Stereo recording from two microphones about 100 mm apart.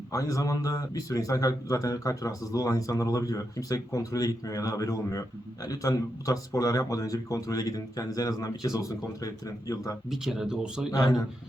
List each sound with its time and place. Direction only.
0.1 s speech: 35° left (ahead or behind)
10.1 s speech: 5° right (ahead or behind)
10.9 s speech: 40° left (ahead or behind)